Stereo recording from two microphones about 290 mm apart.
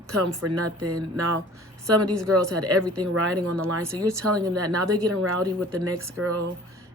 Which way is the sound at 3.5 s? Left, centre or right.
Right.